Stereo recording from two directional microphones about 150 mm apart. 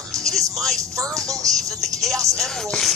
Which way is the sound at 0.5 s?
Centre (ahead or behind).